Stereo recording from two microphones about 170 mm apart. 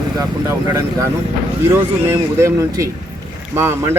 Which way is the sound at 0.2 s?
20° right (ahead or behind).